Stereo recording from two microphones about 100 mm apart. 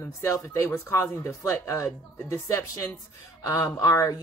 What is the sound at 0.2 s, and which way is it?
Speech, 30° left (ahead or behind).